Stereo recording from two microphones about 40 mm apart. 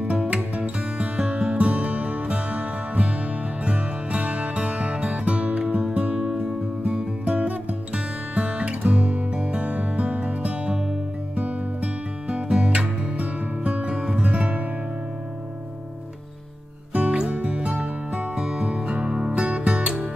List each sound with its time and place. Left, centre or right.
0.0 s music: right
12.3 s music: right
16.9 s music: right